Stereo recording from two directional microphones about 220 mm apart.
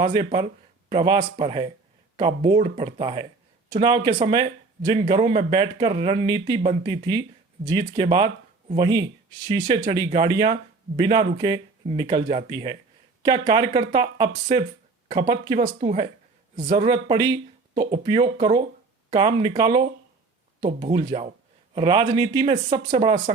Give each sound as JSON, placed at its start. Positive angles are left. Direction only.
{"t": 0.0, "sound": "speech", "side_deg": -25}
{"t": 16.8, "sound": "speech", "side_deg": -20}
{"t": 21.8, "sound": "speech", "side_deg": -20}